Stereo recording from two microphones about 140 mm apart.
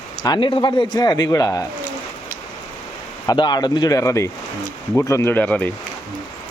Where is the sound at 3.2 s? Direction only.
30° left (ahead or behind).